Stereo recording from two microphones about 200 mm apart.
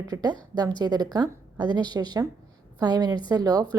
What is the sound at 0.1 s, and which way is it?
A woman's voice, 20° right (ahead or behind).